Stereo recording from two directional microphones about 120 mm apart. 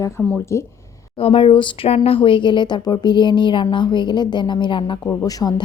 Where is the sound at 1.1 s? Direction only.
50° left (ahead or behind).